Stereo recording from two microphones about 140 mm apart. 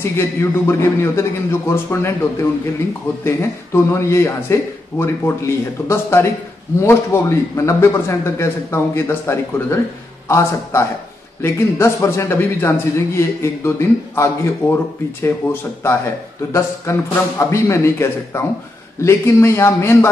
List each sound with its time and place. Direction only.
0.0 s a man's voice: 20° left (ahead or behind)